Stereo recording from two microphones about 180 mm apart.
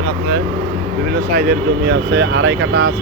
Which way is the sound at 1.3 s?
55° right (ahead or behind).